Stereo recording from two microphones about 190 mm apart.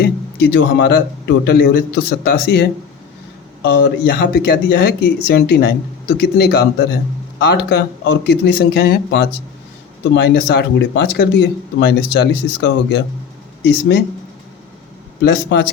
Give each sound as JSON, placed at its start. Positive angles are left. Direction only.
{"t": 0.0, "sound": "speech", "side_deg": 70}
{"t": 15.2, "sound": "speech", "side_deg": 70}